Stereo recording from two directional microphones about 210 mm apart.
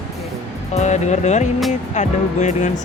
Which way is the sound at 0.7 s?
35° left (ahead or behind).